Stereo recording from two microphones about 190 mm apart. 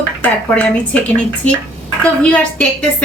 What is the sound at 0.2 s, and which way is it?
A woman's voice, 10° left (ahead or behind).